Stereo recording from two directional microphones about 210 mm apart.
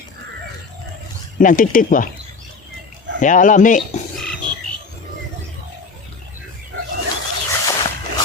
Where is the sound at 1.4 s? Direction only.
40° left (ahead or behind).